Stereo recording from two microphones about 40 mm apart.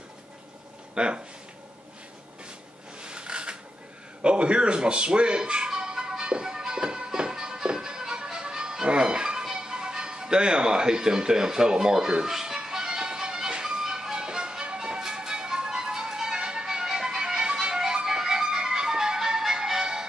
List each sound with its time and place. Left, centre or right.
0.9 s speech: right
3.0 s a sound: right
4.2 s music: right